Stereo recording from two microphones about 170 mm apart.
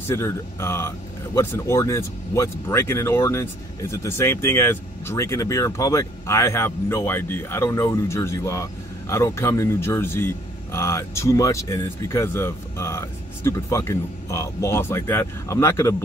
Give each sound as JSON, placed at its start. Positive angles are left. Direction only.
{"t": 0.1, "sound": "speech", "side_deg": 15}